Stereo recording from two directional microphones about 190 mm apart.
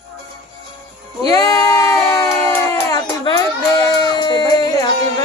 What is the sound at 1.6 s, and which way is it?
Crowd, 15° left (ahead or behind).